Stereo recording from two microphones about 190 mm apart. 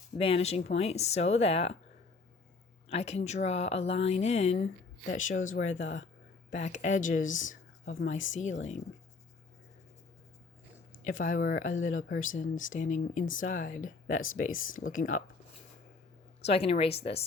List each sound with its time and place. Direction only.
0.2 s speech: 30° left (ahead or behind)
2.9 s speech: 35° left (ahead or behind)
11.0 s speech: 45° left (ahead or behind)
16.5 s speech: 30° left (ahead or behind)